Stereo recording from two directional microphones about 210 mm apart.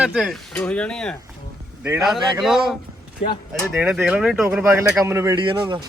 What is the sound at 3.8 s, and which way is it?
Speech, 5° right (ahead or behind).